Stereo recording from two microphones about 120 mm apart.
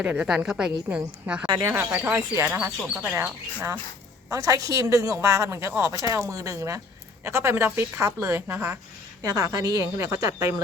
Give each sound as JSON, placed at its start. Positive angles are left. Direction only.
{"t": 0.0, "sound": "a woman's voice", "side_deg": -10}
{"t": 2.5, "sound": "a woman's voice", "side_deg": -5}
{"t": 3.2, "sound": "speech", "side_deg": -25}